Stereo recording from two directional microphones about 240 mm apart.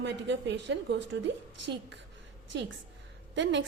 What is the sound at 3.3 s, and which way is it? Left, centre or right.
Speech, right.